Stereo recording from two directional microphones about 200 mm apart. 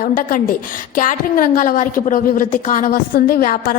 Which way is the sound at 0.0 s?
45° left (ahead or behind).